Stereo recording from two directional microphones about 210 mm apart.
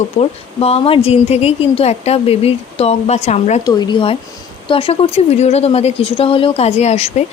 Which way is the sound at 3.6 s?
20° left (ahead or behind).